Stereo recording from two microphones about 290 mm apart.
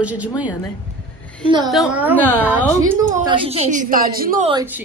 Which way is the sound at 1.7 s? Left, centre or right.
Centre.